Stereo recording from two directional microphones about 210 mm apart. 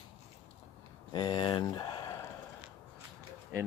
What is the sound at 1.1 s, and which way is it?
Speech, 20° left (ahead or behind).